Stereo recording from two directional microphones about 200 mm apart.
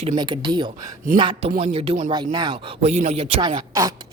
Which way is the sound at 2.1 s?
20° right (ahead or behind).